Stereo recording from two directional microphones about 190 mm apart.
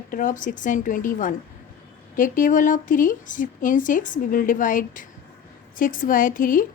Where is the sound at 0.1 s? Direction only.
45° left (ahead or behind).